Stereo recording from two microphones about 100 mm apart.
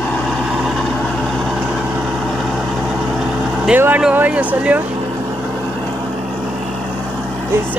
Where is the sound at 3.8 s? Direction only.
20° right (ahead or behind).